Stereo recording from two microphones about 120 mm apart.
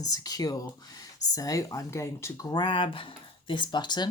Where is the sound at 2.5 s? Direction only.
45° left (ahead or behind).